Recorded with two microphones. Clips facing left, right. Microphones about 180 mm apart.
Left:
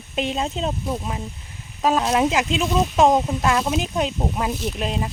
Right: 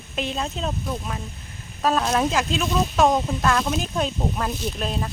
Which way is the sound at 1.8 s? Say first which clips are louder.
Left 2 dB; 15° left (ahead or behind).